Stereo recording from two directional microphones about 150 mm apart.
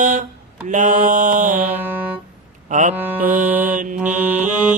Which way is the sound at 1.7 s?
10° right (ahead or behind).